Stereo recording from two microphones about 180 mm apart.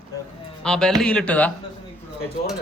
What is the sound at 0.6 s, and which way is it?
Speech, 5° left (ahead or behind).